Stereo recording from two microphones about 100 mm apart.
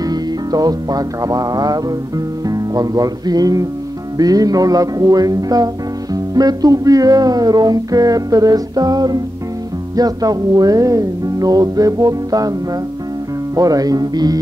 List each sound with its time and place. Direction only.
0.0 s music: 40° right (ahead or behind)
13.6 s music: 40° right (ahead or behind)